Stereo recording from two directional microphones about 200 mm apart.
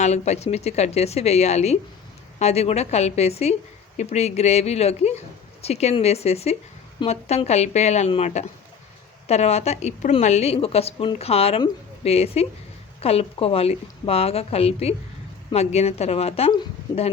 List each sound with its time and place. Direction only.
0.0 s a woman's voice: 35° left (ahead or behind)